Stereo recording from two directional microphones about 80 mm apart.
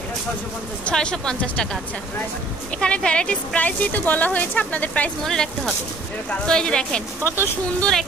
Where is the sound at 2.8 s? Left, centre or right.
Centre.